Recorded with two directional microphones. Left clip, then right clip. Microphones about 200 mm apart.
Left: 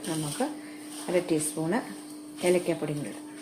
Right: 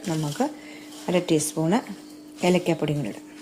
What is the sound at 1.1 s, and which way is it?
Speech, 50° right (ahead or behind).